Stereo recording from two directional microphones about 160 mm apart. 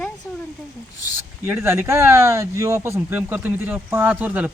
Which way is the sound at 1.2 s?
15° right (ahead or behind).